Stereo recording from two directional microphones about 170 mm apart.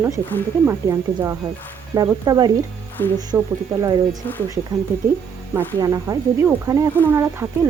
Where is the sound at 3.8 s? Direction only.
25° right (ahead or behind).